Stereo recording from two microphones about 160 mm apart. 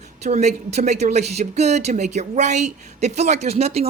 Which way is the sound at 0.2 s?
45° right (ahead or behind).